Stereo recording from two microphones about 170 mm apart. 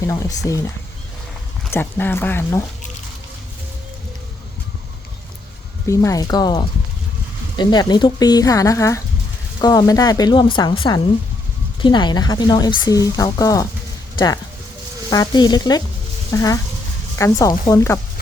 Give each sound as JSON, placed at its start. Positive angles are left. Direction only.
{"t": 0.0, "sound": "a woman's voice", "side_deg": 20}
{"t": 1.7, "sound": "speech", "side_deg": 10}
{"t": 5.9, "sound": "a woman's voice", "side_deg": 20}
{"t": 15.1, "sound": "a woman's voice", "side_deg": 25}